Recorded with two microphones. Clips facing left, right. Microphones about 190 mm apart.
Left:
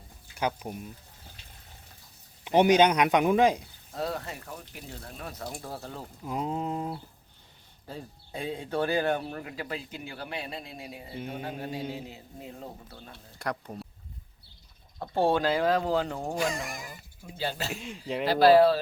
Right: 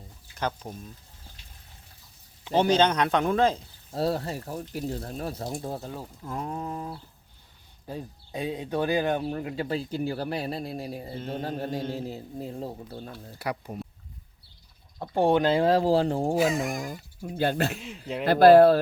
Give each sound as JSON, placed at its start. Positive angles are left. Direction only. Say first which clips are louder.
{"t": 0.3, "sound": "a man's voice", "louder": "left 1 dB", "side_deg": 10}
{"t": 2.4, "sound": "a man's voice", "louder": "left 1 dB", "side_deg": 15}
{"t": 3.9, "sound": "speech", "louder": "right 6 dB", "side_deg": -35}
{"t": 6.2, "sound": "a sound", "louder": "left 3 dB", "side_deg": 15}
{"t": 7.9, "sound": "speech", "louder": "right 4 dB", "side_deg": -15}
{"t": 9.2, "sound": "speech", "louder": "right 7 dB", "side_deg": -25}
{"t": 11.1, "sound": "a man's voice", "louder": "even", "side_deg": 10}
{"t": 11.9, "sound": "speech", "louder": "right 7 dB", "side_deg": -40}
{"t": 13.4, "sound": "speech", "louder": "right 1 dB", "side_deg": -5}
{"t": 15.0, "sound": "speech", "louder": "right 3 dB", "side_deg": -20}
{"t": 16.3, "sound": "speech", "louder": "right 6 dB", "side_deg": -5}
{"t": 16.8, "sound": "speech", "louder": "right 9 dB", "side_deg": -50}
{"t": 17.7, "sound": "speech", "louder": "even", "side_deg": 0}
{"t": 18.3, "sound": "speech", "louder": "right 4 dB", "side_deg": -50}